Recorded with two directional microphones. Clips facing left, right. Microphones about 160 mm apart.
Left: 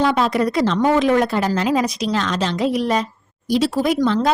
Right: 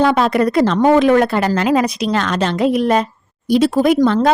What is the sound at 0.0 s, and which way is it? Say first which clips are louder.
A woman's voice: right 4 dB; 55° right (ahead or behind).